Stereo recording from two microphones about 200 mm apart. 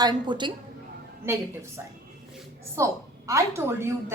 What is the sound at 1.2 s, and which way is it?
A woman's voice, 10° right (ahead or behind).